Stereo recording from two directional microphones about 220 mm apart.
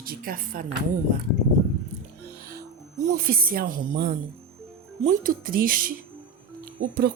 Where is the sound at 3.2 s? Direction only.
40° right (ahead or behind).